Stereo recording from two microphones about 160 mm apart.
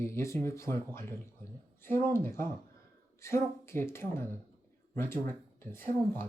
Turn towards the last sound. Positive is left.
turn(degrees=15)  # may be behind; listen again after turning